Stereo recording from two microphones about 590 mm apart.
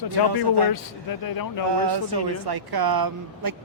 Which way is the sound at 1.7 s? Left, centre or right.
Right.